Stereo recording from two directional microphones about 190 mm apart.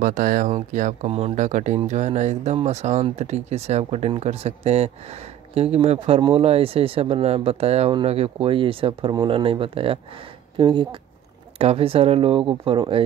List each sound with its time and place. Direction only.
0.0 s speech: 45° right (ahead or behind); by 13.0 s 25° right (ahead or behind)